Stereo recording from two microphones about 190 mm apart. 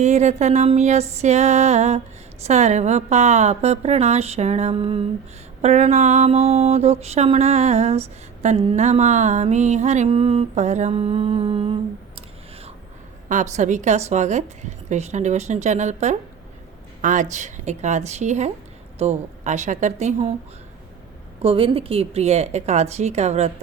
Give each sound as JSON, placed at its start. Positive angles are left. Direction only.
{"t": 0.0, "sound": "mantra", "side_deg": -35}
{"t": 13.2, "sound": "mantra", "side_deg": -40}
{"t": 21.4, "sound": "mantra", "side_deg": -30}